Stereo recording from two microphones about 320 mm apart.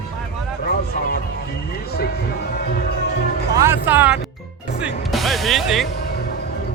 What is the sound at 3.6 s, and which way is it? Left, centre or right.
Speech, centre.